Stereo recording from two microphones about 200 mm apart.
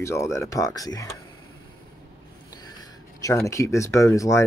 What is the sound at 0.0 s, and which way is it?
Speech, 15° left (ahead or behind).